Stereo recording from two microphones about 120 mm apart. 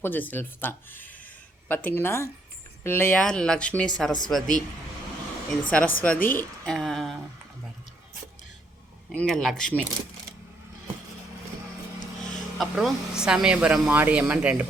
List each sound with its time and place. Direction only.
0.0 s speech: 15° left (ahead or behind)
3.2 s speech: 5° left (ahead or behind)
9.1 s speech: 5° left (ahead or behind)
12.5 s speech: 5° right (ahead or behind)